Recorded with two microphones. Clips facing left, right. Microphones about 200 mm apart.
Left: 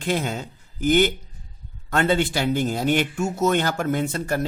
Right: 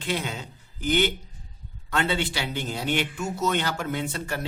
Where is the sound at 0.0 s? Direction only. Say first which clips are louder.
Left 5 dB; 45° left (ahead or behind).